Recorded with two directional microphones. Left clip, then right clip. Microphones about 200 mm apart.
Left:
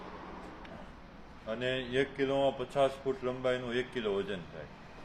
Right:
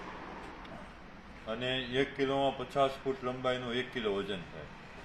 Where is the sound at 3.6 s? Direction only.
30° left (ahead or behind).